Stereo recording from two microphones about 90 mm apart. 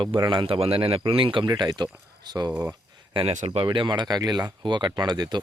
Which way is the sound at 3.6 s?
60° right (ahead or behind).